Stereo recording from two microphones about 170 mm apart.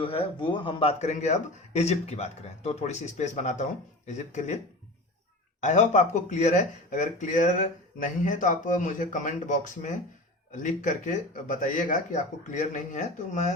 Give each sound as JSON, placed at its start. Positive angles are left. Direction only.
{"t": 0.0, "sound": "a man's voice", "side_deg": 30}